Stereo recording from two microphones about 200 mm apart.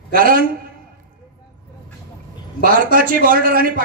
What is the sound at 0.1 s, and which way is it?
Speech, 45° right (ahead or behind).